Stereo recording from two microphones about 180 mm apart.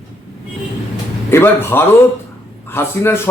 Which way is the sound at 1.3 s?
15° left (ahead or behind).